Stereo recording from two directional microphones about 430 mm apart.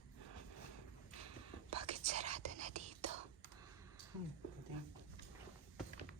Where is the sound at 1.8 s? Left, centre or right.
Centre.